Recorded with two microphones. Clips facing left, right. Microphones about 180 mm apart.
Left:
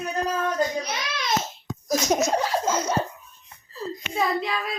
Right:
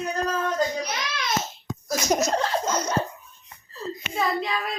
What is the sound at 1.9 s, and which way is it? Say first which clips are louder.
Laughter: left 1 dB; 5° right (ahead or behind).